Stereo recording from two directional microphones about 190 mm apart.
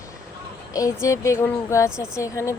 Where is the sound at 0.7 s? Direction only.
15° left (ahead or behind).